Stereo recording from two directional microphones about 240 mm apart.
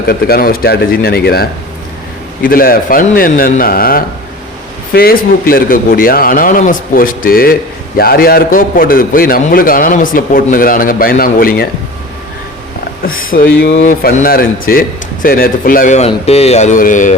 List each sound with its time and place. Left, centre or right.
0.1 s a man's voice: left
13.1 s a man's voice: left